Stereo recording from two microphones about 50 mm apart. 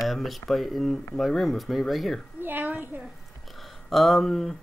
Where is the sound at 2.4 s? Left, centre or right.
Right.